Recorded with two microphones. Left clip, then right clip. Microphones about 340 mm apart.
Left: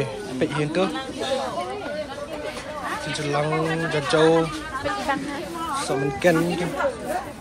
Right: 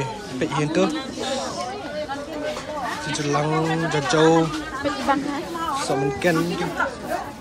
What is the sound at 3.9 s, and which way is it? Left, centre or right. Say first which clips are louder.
Speech: right 1 dB; centre.